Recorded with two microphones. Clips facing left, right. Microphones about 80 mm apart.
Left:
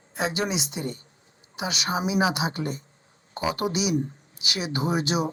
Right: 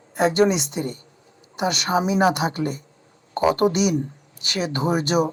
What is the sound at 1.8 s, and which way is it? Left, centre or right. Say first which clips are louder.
Speech: right 5 dB; right.